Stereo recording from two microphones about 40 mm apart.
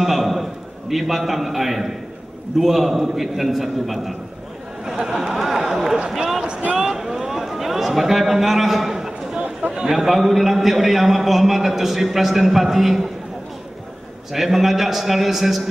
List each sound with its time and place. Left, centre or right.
0.0 s a sound: centre
2.6 s a man's voice: centre
4.8 s speech: centre
5.3 s speech: centre
6.8 s a sound: centre
9.4 s run: right
9.8 s a man's voice: centre
14.3 s a man's voice: centre